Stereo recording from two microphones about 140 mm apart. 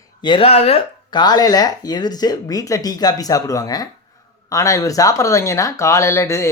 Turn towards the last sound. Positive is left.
turn(degrees=20)  # may be behind; listen again after turning